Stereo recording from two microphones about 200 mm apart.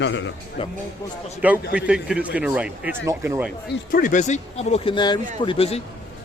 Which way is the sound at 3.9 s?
40° left (ahead or behind).